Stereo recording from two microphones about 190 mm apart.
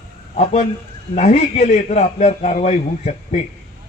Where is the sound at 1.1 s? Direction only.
35° left (ahead or behind).